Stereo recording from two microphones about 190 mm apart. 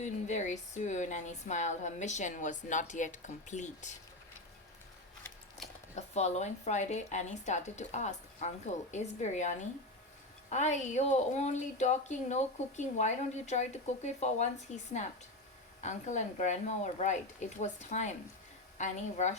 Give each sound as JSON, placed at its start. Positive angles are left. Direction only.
{"t": 0.0, "sound": "a woman's voice", "side_deg": 40}
{"t": 5.6, "sound": "a sound", "side_deg": 0}
{"t": 6.1, "sound": "a woman's voice", "side_deg": 35}